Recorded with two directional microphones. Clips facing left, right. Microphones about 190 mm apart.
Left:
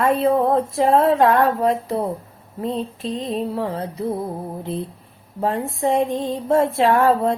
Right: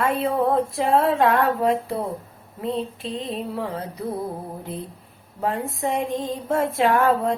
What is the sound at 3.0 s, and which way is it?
Female singing, 40° left (ahead or behind).